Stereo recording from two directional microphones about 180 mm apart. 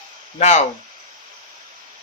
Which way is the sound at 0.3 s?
40° left (ahead or behind).